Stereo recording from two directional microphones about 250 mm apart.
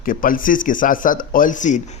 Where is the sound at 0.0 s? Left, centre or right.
Left.